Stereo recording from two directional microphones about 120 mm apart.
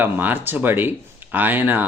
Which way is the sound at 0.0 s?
15° right (ahead or behind).